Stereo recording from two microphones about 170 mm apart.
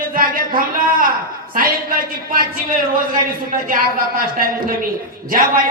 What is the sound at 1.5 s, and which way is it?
Speech, 55° right (ahead or behind).